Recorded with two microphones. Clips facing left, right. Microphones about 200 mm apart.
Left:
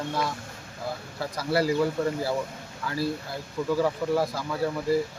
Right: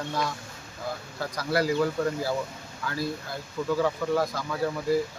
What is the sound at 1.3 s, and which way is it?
Speech, 5° left (ahead or behind).